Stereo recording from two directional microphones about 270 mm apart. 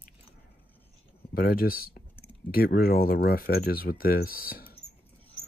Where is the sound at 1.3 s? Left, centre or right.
Left.